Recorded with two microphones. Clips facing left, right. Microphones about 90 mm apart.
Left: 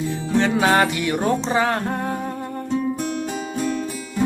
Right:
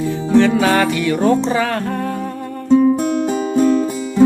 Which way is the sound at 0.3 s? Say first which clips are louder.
Right 4 dB; 20° left (ahead or behind).